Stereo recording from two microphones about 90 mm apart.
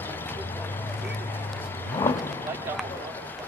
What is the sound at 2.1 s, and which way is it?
Vehicle, 25° left (ahead or behind).